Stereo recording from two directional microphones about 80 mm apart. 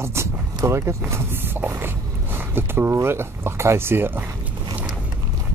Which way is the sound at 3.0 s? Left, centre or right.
Right.